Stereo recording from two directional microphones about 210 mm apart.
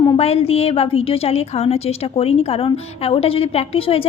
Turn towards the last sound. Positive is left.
turn(degrees=25)  # may be behind; listen again after turning